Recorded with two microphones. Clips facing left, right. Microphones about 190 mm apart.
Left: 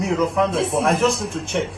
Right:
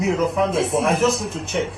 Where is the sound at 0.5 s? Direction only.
Centre (ahead or behind).